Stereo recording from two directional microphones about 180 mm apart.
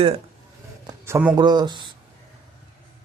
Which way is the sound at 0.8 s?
15° right (ahead or behind).